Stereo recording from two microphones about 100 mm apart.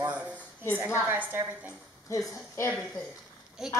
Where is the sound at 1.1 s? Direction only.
20° right (ahead or behind).